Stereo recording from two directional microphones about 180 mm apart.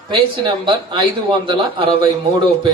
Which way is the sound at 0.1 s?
25° right (ahead or behind).